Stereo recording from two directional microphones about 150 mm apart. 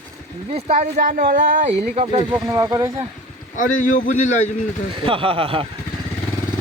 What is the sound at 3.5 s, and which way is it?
Speech, 60° left (ahead or behind).